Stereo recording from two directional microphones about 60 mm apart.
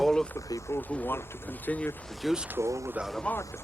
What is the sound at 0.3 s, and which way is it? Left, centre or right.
Speech, left.